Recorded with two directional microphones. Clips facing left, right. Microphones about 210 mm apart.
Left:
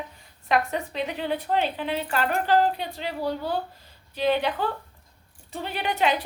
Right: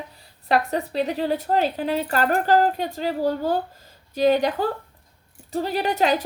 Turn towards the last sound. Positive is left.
turn(degrees=-40)  # may be behind; listen again after turning